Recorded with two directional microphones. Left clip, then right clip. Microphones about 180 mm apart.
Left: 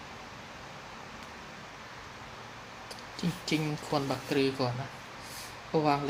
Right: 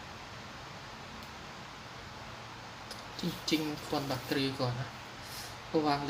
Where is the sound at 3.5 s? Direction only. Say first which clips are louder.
Left 2 dB; 45° left (ahead or behind).